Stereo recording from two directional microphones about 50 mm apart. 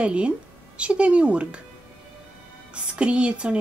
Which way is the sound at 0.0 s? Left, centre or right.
Right.